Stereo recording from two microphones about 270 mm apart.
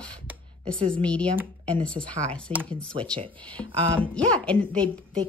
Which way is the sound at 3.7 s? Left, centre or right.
Centre.